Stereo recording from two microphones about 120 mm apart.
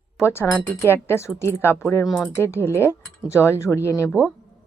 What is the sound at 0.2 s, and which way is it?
Speech, 20° left (ahead or behind).